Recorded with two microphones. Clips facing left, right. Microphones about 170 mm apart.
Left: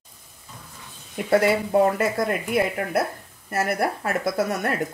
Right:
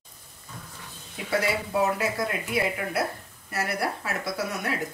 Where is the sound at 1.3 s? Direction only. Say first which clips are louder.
Left 8 dB; 55° left (ahead or behind).